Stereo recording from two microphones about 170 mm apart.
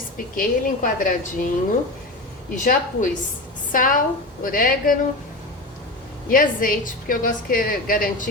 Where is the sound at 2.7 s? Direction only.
50° left (ahead or behind).